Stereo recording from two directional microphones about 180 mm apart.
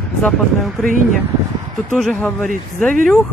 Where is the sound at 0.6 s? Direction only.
Centre (ahead or behind).